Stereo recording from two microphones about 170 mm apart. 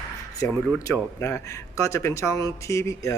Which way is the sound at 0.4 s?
15° left (ahead or behind).